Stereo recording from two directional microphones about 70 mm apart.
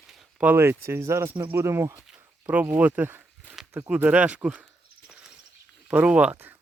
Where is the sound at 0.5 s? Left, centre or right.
Right.